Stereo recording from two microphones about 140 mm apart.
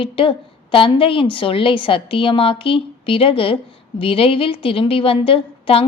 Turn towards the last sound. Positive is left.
turn(degrees=40)  # may be behind; listen again after turning